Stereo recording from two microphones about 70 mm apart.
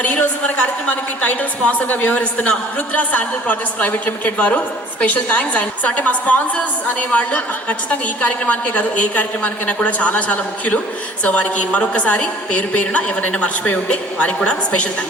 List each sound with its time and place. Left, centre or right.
0.0 s a woman's voice: left